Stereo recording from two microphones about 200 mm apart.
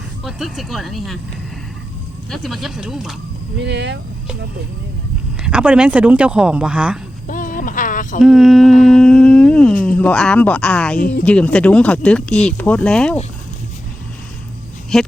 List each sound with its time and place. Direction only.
0.3 s speech: centre (ahead or behind)
2.3 s speech: centre (ahead or behind)
3.6 s speech: 60° right (ahead or behind)
5.5 s speech: 5° right (ahead or behind)
7.3 s a sound: 40° left (ahead or behind)
8.2 s speech: centre (ahead or behind)
8.8 s humming: centre (ahead or behind)
9.8 s speech: 5° left (ahead or behind)
14.9 s speech: centre (ahead or behind)